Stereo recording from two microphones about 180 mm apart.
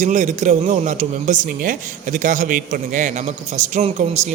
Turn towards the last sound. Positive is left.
turn(degrees=-40)  # may be behind; listen again after turning